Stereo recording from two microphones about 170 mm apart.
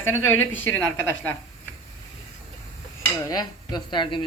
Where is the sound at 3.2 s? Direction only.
25° left (ahead or behind).